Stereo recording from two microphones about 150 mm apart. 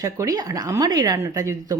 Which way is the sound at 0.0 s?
25° right (ahead or behind).